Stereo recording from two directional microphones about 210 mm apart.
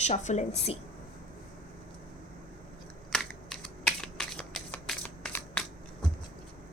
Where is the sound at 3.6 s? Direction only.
5° left (ahead or behind).